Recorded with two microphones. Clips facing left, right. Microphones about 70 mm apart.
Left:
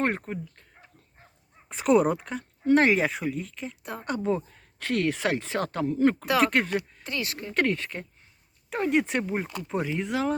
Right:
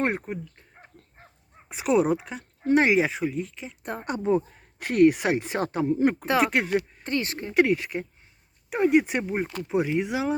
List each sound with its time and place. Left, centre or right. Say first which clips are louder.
0.2 s speech: right 1 dB; centre
1.7 s speech: left 1 dB; centre
4.0 s speech: right 3 dB; right
7.0 s speech: right 4 dB; right
7.5 s speech: right 5 dB; centre